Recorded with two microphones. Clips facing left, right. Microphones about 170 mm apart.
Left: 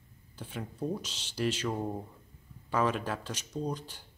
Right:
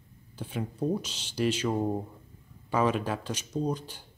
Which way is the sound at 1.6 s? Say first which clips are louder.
Right 5 dB; 20° right (ahead or behind).